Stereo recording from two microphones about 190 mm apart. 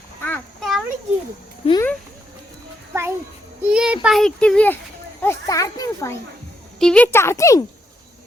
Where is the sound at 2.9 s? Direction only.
15° right (ahead or behind); by 4.8 s 5° left (ahead or behind).